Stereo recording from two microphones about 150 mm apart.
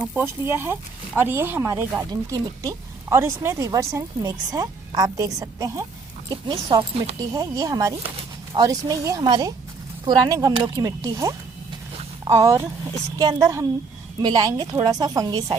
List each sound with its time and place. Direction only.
0.1 s speech: 15° right (ahead or behind)
12.4 s speech: 20° right (ahead or behind)